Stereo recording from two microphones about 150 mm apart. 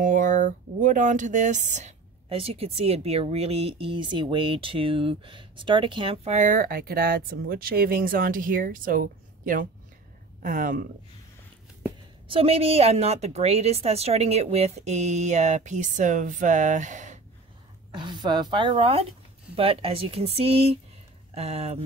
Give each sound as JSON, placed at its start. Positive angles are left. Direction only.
{"t": 0.0, "sound": "speech", "side_deg": -60}
{"t": 6.2, "sound": "speech", "side_deg": -55}
{"t": 12.3, "sound": "a woman's voice", "side_deg": -40}
{"t": 17.9, "sound": "a woman's voice", "side_deg": -30}